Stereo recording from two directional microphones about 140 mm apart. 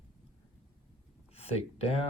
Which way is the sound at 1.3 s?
50° left (ahead or behind).